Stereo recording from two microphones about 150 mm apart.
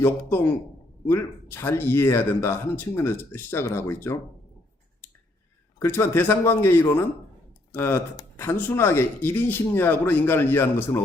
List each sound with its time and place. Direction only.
0.0 s speech: 15° left (ahead or behind)
5.8 s speech: 15° left (ahead or behind)